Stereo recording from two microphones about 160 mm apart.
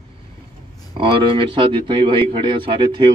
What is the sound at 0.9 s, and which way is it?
A man's voice, 30° right (ahead or behind).